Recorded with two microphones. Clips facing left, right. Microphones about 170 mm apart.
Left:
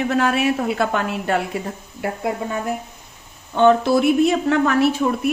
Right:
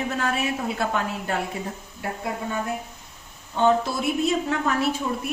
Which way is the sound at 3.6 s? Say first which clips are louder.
Left 7 dB; 70° left (ahead or behind).